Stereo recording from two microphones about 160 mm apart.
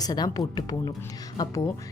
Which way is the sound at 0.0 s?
25° left (ahead or behind).